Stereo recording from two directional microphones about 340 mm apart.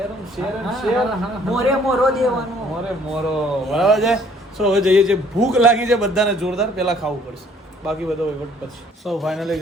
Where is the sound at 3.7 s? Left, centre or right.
Centre.